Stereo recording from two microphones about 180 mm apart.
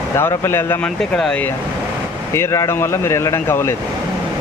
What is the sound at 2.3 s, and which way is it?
Speech, 15° left (ahead or behind).